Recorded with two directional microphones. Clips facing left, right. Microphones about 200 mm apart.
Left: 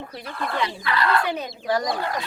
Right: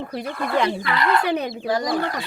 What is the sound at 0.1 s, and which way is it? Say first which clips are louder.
Speech: right 6 dB; 50° right (ahead or behind).